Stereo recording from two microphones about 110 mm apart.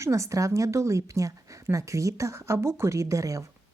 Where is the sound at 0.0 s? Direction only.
25° right (ahead or behind).